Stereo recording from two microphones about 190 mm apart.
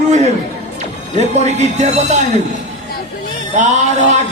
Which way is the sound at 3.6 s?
40° right (ahead or behind).